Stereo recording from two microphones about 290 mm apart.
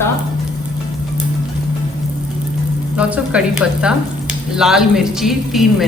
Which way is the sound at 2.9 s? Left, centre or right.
Centre.